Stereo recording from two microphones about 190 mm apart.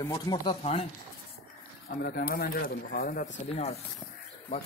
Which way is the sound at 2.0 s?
50° left (ahead or behind).